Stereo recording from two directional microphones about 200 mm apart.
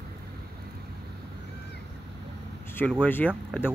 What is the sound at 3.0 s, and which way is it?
Speech, 10° left (ahead or behind).